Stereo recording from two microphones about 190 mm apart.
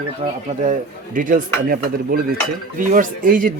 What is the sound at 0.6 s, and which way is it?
Speech, 45° right (ahead or behind).